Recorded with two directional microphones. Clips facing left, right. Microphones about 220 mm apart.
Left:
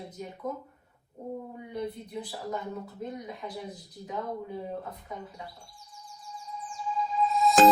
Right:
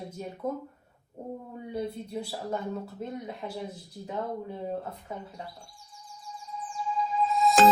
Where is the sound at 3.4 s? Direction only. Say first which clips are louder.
Right 1 dB; 40° right (ahead or behind).